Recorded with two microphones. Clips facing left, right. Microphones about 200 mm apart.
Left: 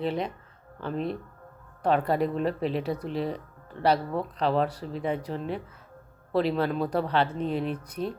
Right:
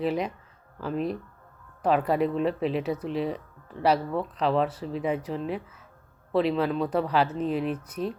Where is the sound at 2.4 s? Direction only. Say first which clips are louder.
Right 1 dB; 35° left (ahead or behind).